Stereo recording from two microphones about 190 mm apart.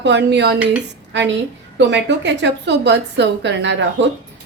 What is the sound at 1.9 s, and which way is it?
A woman's voice, 70° right (ahead or behind).